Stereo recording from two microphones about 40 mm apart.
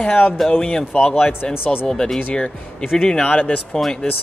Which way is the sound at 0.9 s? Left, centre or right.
Left.